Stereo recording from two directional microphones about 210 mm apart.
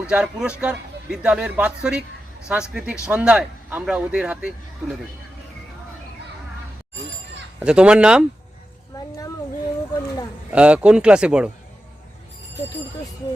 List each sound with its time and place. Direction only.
0.1 s speech: 5° right (ahead or behind)
7.6 s speech: 5° right (ahead or behind)
8.9 s a sound: 15° left (ahead or behind)
10.5 s speech: 5° right (ahead or behind)